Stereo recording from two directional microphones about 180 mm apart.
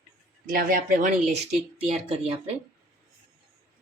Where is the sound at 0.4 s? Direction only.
50° right (ahead or behind).